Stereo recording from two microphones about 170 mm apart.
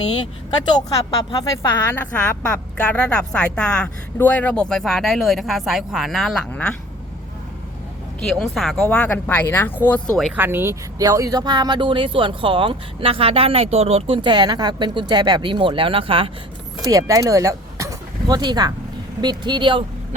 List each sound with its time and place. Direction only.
0.7 s a woman's voice: 20° left (ahead or behind); by 6.7 s 5° left (ahead or behind)
8.4 s speech: centre (ahead or behind)
10.3 s speech: 10° right (ahead or behind); by 16.3 s 30° right (ahead or behind)
16.8 s speech: 20° right (ahead or behind)